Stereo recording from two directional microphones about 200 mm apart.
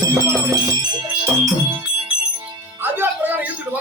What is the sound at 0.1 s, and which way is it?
Music, 20° right (ahead or behind).